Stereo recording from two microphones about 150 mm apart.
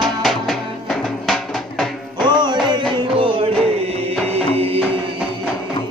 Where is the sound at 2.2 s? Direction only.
30° right (ahead or behind).